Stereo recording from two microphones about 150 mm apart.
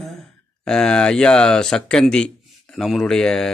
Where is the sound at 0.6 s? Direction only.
5° left (ahead or behind).